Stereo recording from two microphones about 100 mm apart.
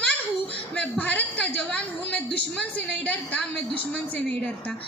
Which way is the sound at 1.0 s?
15° left (ahead or behind).